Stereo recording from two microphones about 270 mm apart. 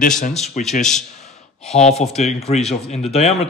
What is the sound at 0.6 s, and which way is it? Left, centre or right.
Speech, left.